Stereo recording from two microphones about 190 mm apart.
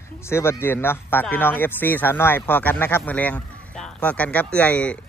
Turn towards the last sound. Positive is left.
turn(degrees=5)  # may be behind; listen again after turning